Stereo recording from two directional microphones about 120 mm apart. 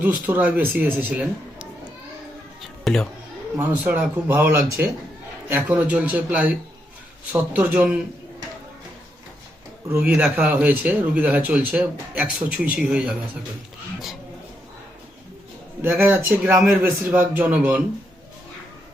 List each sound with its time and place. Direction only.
0.0 s a man's voice: 15° right (ahead or behind)
2.8 s speech: 5° left (ahead or behind)
3.6 s a man's voice: 15° right (ahead or behind)
9.9 s a man's voice: 15° right (ahead or behind)
15.8 s a man's voice: 15° right (ahead or behind)